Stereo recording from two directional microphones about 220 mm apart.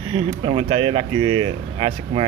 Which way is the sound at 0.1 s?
25° right (ahead or behind).